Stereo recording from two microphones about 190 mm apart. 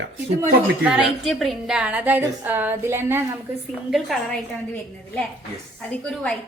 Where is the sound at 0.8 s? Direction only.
Centre (ahead or behind).